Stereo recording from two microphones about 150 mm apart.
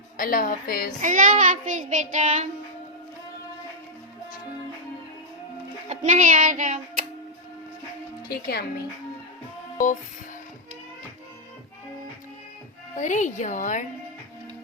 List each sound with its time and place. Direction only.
0.2 s a woman's voice: 65° left (ahead or behind)
1.0 s child singing: 60° right (ahead or behind)
5.9 s child singing: 55° right (ahead or behind)
8.3 s speech: 90° left
9.7 s music: 60° left (ahead or behind)
13.0 s speech: 55° left (ahead or behind)